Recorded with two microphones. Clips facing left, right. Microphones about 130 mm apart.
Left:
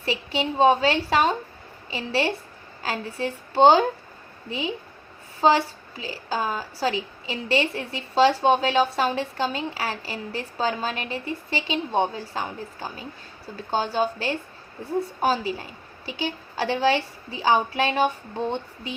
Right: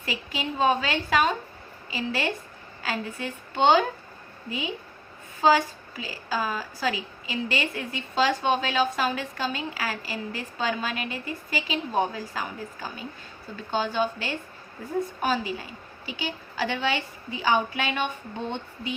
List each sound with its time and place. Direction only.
0.0 s a woman's voice: 30° left (ahead or behind)